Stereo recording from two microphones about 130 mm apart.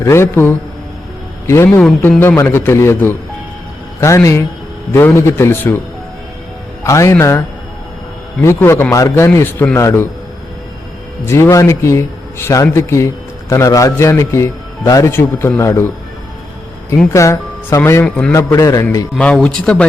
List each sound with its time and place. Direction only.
0.0 s a man's voice: 20° left (ahead or behind)
6.8 s a man's voice: 25° left (ahead or behind)
8.4 s a man's voice: 20° left (ahead or behind)
11.3 s a man's voice: 20° left (ahead or behind)
17.1 s speech: 25° left (ahead or behind)
18.0 s a man's voice: 10° left (ahead or behind)
18.3 s a man's voice: 25° left (ahead or behind)
19.1 s a man's voice: 5° left (ahead or behind)